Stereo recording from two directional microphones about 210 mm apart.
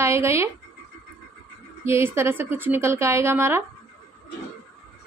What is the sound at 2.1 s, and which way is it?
A woman's voice, 10° right (ahead or behind).